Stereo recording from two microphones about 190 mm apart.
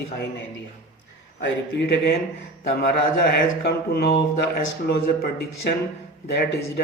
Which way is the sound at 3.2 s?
55° left (ahead or behind).